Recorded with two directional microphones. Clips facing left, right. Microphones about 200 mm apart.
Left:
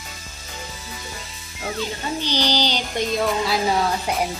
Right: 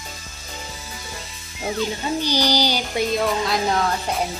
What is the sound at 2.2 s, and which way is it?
Music, 10° right (ahead or behind).